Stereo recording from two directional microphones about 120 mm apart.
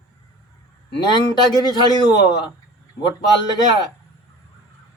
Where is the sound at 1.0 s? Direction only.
35° left (ahead or behind).